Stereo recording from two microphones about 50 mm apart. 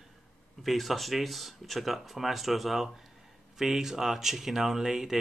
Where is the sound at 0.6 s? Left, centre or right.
Centre.